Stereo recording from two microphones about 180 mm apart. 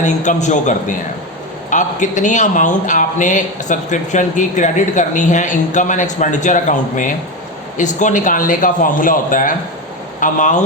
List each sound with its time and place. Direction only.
0.0 s speech: 40° left (ahead or behind)